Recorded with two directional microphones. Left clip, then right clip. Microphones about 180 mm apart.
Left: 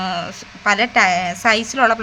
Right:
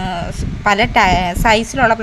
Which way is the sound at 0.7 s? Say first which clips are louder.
Right 2 dB; 20° right (ahead or behind).